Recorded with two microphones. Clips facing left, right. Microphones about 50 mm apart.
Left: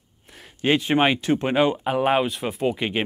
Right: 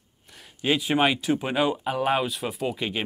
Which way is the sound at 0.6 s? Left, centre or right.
Left.